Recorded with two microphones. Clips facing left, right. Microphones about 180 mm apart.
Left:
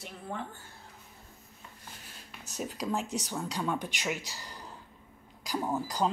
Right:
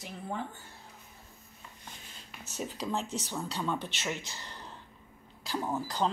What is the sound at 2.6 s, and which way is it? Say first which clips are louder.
Speech: left 1 dB; 5° left (ahead or behind).